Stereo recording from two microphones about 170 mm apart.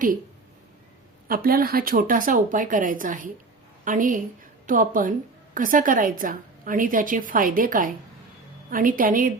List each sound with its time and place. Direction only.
1.3 s a woman's voice: 60° right (ahead or behind)